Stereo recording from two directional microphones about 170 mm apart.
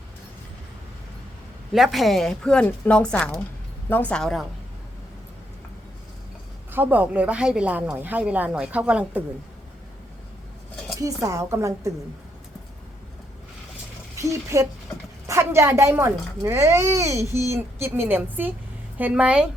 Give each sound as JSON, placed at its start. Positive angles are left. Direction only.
{"t": 1.7, "sound": "a woman's voice", "side_deg": 0}
{"t": 6.7, "sound": "a child's voice", "side_deg": -10}
{"t": 10.9, "sound": "a child's voice", "side_deg": -20}
{"t": 14.2, "sound": "a child's voice", "side_deg": -20}